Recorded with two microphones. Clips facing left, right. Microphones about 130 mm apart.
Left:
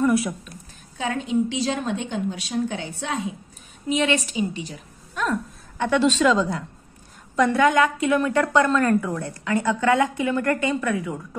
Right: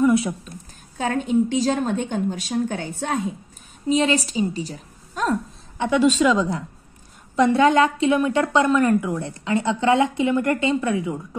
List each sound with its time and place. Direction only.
0.9 s a woman's voice: 45° right (ahead or behind)
5.8 s a woman's voice: 10° right (ahead or behind)
7.3 s a woman's voice: 25° right (ahead or behind)